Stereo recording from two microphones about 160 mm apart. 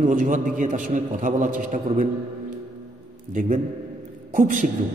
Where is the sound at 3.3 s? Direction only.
55° right (ahead or behind).